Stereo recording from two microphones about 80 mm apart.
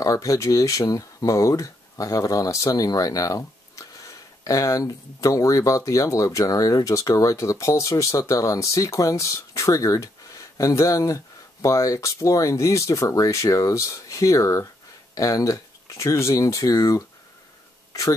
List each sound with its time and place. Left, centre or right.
0.0 s speech: left